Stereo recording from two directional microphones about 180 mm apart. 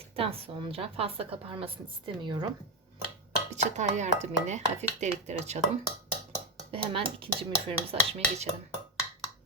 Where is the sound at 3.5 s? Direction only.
40° right (ahead or behind).